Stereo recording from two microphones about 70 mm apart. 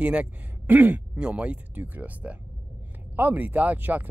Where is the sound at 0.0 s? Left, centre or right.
Centre.